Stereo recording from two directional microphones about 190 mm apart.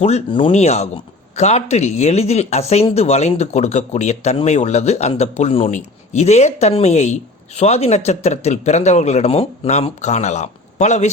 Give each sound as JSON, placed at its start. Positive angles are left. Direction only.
{"t": 0.0, "sound": "speech", "side_deg": 30}